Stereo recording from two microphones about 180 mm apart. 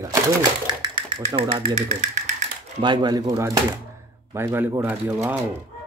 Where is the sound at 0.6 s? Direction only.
25° right (ahead or behind).